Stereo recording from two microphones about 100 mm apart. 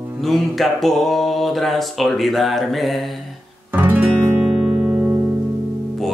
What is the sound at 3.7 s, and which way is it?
Guitar, 15° right (ahead or behind).